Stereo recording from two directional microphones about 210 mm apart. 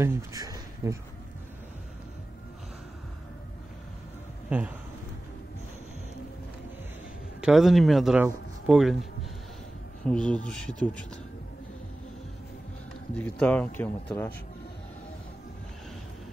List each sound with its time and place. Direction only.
0.0 s speech: 15° right (ahead or behind)
4.5 s speech: 5° right (ahead or behind)
7.4 s speech: centre (ahead or behind)
10.0 s speech: 5° left (ahead or behind)
13.1 s speech: 5° left (ahead or behind)